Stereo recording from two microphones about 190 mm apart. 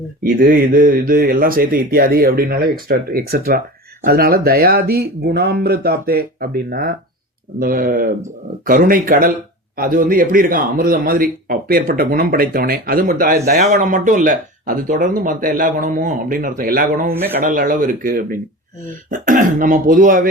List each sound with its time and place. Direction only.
0.2 s a man's voice: 45° right (ahead or behind)
17.1 s speech: 10° right (ahead or behind)
17.4 s a man's voice: 45° right (ahead or behind)